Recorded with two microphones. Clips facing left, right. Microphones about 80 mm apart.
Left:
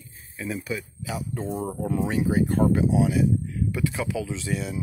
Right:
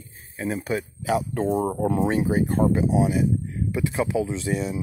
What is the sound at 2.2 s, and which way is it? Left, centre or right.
Speech, right.